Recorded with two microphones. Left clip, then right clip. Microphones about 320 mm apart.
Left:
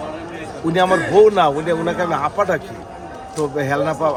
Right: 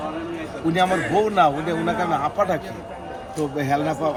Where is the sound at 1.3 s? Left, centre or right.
Centre.